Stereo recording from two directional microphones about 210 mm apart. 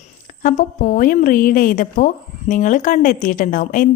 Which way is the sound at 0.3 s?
40° left (ahead or behind).